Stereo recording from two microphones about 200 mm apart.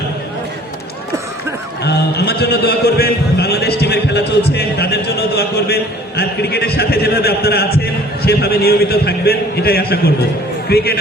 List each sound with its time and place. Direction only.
1.8 s a man's voice: 55° left (ahead or behind)